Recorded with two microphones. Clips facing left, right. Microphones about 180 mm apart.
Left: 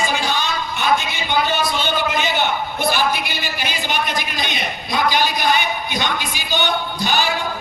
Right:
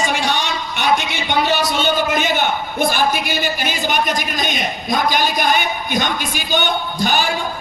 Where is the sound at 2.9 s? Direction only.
50° right (ahead or behind).